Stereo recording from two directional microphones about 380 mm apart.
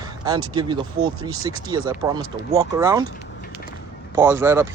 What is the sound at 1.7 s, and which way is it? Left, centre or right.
Speech, centre.